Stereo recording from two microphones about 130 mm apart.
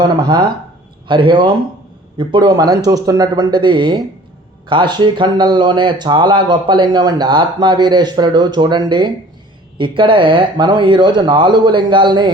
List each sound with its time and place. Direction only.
0.0 s speech: 35° right (ahead or behind)